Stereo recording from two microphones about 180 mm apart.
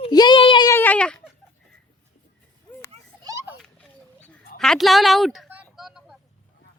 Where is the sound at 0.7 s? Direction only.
10° left (ahead or behind).